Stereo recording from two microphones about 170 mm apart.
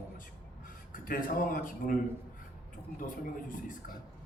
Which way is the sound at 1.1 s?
55° left (ahead or behind).